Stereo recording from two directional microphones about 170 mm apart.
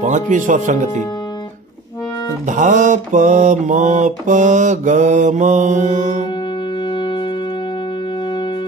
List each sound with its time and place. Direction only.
0.0 s mantra: 50° right (ahead or behind)
2.4 s mantra: 45° right (ahead or behind)